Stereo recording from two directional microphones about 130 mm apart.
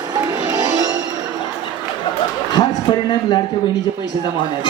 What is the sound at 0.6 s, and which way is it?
Music, 30° right (ahead or behind).